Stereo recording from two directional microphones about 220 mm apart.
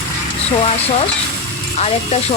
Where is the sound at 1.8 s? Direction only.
30° left (ahead or behind).